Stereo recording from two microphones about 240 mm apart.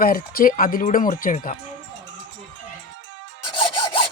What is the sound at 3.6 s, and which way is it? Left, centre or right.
Rub, left.